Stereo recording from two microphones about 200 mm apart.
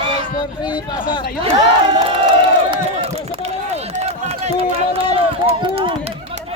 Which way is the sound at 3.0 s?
30° right (ahead or behind).